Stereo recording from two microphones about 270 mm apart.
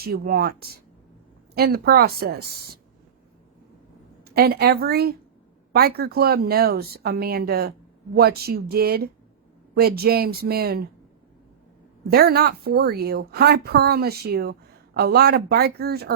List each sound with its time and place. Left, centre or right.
0.0 s a woman's voice: right
4.2 s a woman's voice: right
12.1 s a woman's voice: right